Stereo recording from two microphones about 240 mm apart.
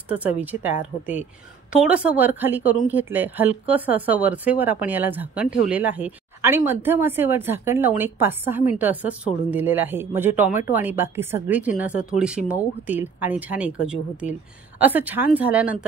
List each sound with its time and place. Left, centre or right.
0.1 s speech: centre